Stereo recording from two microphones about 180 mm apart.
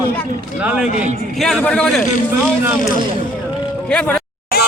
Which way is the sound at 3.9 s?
5° left (ahead or behind).